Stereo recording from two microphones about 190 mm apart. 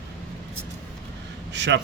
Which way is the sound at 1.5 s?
65° right (ahead or behind).